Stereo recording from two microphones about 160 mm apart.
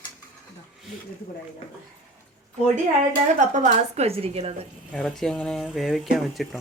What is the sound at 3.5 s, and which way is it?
A woman's voice, 50° right (ahead or behind).